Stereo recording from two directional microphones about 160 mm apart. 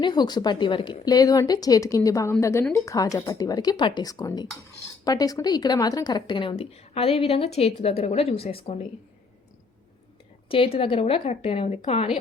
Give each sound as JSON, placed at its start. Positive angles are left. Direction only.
{"t": 0.0, "sound": "a woman's voice", "side_deg": 25}
{"t": 10.5, "sound": "a woman's voice", "side_deg": 35}